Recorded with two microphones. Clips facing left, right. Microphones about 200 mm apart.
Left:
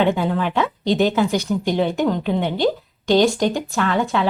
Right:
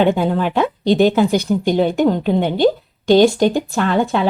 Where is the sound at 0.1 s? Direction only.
35° right (ahead or behind).